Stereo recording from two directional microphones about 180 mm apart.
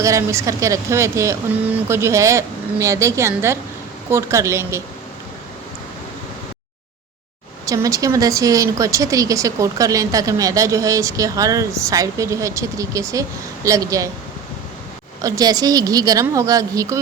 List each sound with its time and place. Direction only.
0.0 s speech: 15° right (ahead or behind)
7.6 s a woman's voice: 20° right (ahead or behind)
15.2 s a woman's voice: 20° right (ahead or behind)